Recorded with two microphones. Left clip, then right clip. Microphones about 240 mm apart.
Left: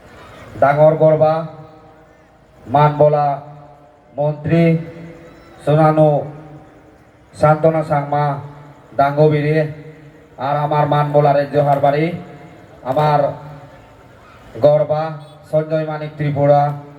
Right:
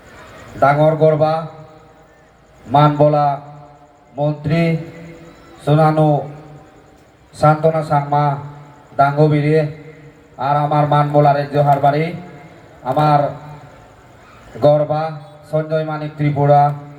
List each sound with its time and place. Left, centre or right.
0.6 s a man's voice: right
2.7 s a man's voice: right
7.3 s a man's voice: right
14.6 s a man's voice: right